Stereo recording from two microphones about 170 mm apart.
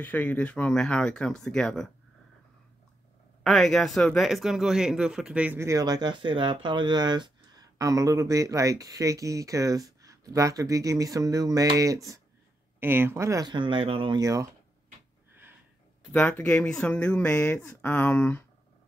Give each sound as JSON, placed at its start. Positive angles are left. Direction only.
{"t": 0.0, "sound": "speech", "side_deg": 10}
{"t": 3.4, "sound": "speech", "side_deg": 0}
{"t": 16.1, "sound": "speech", "side_deg": 10}